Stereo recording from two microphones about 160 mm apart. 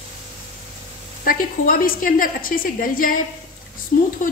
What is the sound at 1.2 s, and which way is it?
A woman's voice, 60° left (ahead or behind).